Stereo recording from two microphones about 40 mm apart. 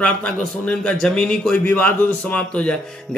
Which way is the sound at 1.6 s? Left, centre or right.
Left.